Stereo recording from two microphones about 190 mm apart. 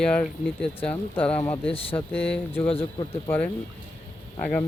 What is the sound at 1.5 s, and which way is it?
Speech, 30° left (ahead or behind).